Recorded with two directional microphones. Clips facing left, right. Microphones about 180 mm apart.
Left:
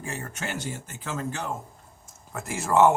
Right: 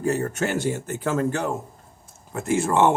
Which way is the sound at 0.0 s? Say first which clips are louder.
Right 11 dB; 40° right (ahead or behind).